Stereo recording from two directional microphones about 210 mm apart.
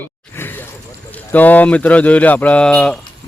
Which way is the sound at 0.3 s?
10° left (ahead or behind).